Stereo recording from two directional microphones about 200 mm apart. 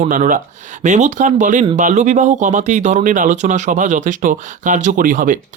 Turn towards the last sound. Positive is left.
turn(degrees=-40)  # may be behind; listen again after turning